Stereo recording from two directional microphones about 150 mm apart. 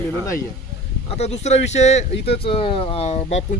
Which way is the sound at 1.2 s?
45° left (ahead or behind).